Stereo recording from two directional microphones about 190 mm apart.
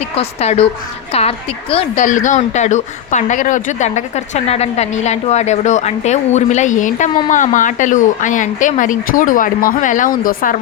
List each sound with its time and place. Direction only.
0.2 s a woman's voice: 35° left (ahead or behind)